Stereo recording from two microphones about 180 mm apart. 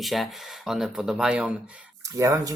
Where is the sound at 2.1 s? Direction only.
20° right (ahead or behind).